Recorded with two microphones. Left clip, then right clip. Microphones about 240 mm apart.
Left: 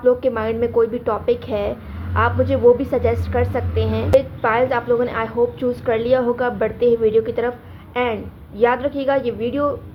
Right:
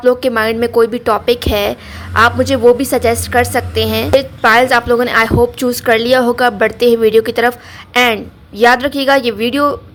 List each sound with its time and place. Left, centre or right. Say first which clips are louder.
0.0 s a woman's voice: right 5 dB; right